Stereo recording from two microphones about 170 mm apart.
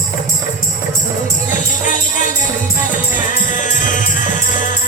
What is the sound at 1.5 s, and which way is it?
Music, 50° left (ahead or behind).